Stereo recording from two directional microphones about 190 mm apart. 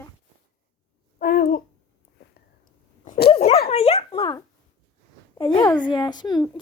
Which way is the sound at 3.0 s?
55° left (ahead or behind).